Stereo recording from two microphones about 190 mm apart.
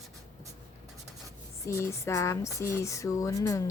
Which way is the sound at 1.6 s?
15° left (ahead or behind).